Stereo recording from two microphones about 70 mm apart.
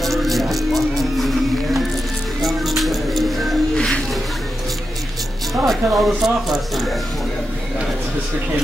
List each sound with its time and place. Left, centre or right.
0.0 s music: centre
3.7 s music: centre
5.7 s speech: centre